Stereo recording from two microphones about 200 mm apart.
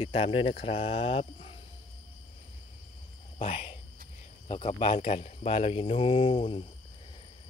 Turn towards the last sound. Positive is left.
turn(degrees=25)  # may be behind; listen again after turning